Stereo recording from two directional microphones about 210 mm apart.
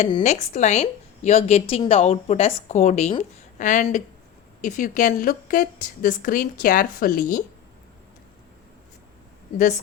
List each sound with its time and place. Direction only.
0.0 s a woman's voice: 35° left (ahead or behind)
9.6 s a woman's voice: 35° left (ahead or behind)